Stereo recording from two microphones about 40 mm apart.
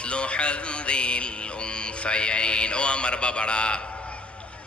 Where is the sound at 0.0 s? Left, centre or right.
Left.